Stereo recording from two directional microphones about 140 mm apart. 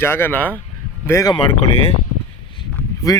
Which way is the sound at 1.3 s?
40° left (ahead or behind).